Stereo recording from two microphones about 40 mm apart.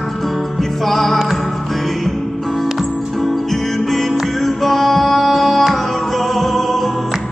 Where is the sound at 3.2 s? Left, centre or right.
Centre.